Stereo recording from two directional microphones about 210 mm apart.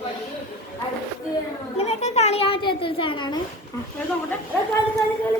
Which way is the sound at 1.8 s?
30° left (ahead or behind).